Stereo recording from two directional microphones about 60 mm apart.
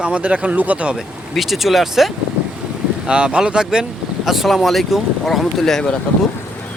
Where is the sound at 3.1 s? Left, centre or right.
Centre.